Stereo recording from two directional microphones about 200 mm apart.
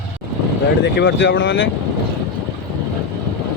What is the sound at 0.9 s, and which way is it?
Speech, 60° left (ahead or behind).